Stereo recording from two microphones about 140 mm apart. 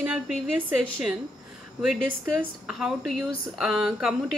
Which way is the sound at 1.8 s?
5° right (ahead or behind).